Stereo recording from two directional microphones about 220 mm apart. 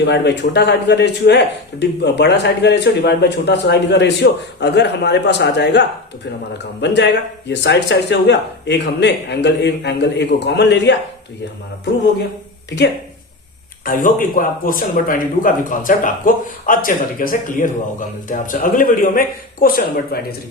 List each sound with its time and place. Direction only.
0.0 s speech: 50° left (ahead or behind)
6.8 s speech: 50° left (ahead or behind)
13.8 s speech: 40° left (ahead or behind)